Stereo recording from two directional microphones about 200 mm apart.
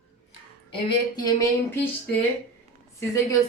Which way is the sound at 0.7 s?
20° left (ahead or behind).